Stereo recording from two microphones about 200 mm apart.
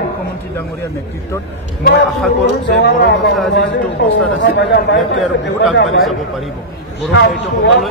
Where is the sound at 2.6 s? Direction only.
60° left (ahead or behind).